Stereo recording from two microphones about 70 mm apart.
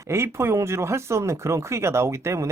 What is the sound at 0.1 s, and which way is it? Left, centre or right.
Speech, right.